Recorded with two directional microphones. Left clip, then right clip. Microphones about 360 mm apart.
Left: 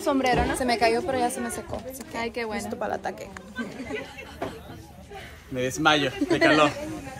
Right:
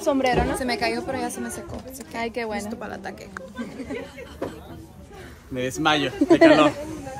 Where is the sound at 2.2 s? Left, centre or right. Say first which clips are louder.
Right 2 dB; centre.